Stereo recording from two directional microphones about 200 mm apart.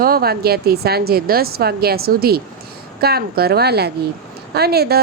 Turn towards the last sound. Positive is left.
turn(degrees=-50)  # may be behind; listen again after turning